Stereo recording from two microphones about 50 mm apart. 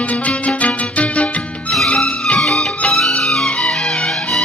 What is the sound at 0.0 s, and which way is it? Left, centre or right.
Music, left.